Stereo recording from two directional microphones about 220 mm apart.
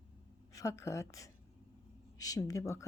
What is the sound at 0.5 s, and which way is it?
A woman's voice, 15° left (ahead or behind).